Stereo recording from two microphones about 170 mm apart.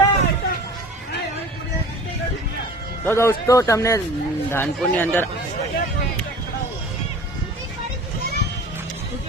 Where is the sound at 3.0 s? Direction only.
15° left (ahead or behind).